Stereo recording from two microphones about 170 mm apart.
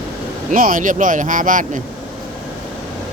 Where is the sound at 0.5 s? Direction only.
55° right (ahead or behind).